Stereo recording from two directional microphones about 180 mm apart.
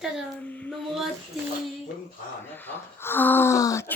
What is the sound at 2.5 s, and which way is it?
Speech, 10° left (ahead or behind).